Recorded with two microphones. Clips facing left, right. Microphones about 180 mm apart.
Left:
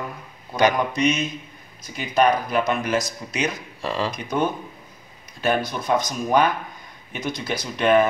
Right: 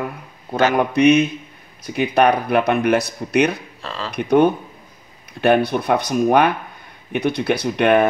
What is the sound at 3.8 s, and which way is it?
Speech, 15° left (ahead or behind).